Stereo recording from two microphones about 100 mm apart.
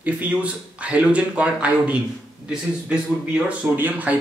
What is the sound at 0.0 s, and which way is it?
Speech, 15° right (ahead or behind).